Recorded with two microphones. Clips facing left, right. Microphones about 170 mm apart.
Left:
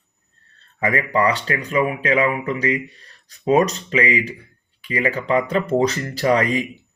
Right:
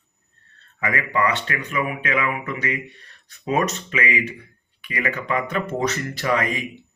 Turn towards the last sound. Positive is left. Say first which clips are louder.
# left 5 dB
turn(degrees=35)  # may be behind; listen again after turning